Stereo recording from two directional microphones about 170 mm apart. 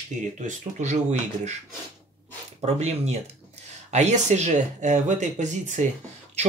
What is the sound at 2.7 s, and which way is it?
Speech, 40° right (ahead or behind).